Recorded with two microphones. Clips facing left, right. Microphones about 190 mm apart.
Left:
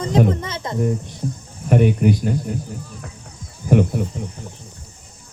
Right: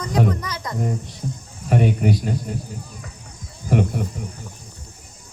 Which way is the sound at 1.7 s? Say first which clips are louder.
Left 3 dB; 65° left (ahead or behind).